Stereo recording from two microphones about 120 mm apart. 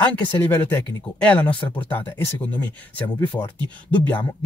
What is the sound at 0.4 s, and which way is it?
Speech, 20° left (ahead or behind).